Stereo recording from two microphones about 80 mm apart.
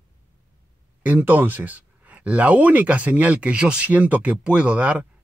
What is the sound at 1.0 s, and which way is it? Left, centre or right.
Speech, right.